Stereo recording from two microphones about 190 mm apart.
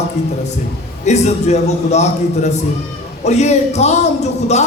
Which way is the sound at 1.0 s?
35° left (ahead or behind).